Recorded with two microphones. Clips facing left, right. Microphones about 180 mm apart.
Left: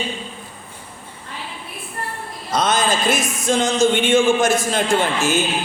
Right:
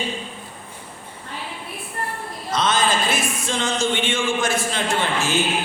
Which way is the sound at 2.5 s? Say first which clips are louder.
Left 2 dB; 40° left (ahead or behind).